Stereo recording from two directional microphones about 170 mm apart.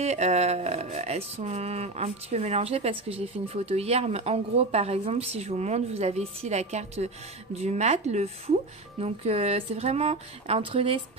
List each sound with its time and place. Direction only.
0.0 s speech: 40° right (ahead or behind)